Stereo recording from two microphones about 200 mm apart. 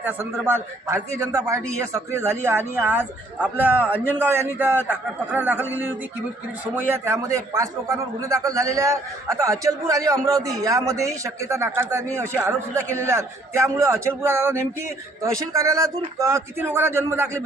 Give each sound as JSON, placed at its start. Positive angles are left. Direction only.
{"t": 0.0, "sound": "a man's voice", "side_deg": -10}